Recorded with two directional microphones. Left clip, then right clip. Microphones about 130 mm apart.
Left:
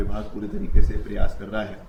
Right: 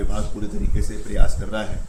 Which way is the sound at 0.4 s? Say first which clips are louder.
Even; 15° right (ahead or behind).